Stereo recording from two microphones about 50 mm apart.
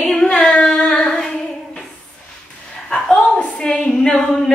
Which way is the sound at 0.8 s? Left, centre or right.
Centre.